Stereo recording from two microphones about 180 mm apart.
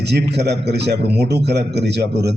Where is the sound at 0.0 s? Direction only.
70° right (ahead or behind).